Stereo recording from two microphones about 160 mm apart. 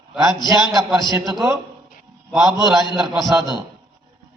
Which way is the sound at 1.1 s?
20° right (ahead or behind).